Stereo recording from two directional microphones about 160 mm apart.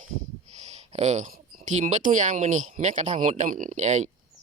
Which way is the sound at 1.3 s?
55° right (ahead or behind).